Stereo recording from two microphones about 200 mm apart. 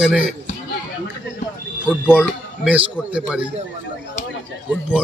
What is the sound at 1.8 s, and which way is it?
A man's voice, 5° right (ahead or behind).